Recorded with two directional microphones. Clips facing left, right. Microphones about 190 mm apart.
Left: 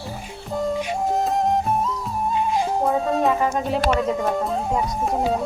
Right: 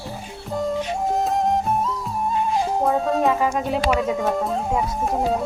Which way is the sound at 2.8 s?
Centre (ahead or behind).